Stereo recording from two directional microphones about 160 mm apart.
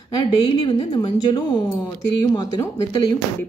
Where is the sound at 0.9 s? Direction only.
30° left (ahead or behind).